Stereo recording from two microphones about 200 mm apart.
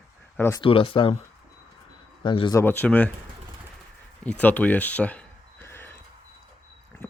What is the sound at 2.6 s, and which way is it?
Speech, 10° left (ahead or behind).